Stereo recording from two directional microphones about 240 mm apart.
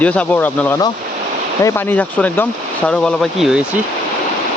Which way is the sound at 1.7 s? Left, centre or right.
Centre.